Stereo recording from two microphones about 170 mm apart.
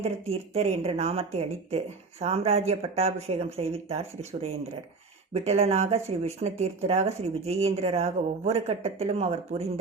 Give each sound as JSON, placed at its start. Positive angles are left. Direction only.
{"t": 0.0, "sound": "speech", "side_deg": -35}